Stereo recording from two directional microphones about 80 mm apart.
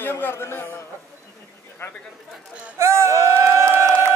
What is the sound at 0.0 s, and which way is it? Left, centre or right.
Speech, left.